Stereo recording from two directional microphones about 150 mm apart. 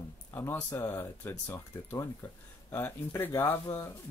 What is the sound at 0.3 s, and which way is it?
Speech, 15° left (ahead or behind).